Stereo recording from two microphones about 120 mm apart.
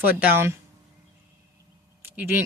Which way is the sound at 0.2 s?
15° right (ahead or behind).